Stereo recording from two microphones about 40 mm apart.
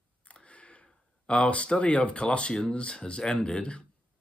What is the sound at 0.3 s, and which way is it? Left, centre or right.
Speech, left.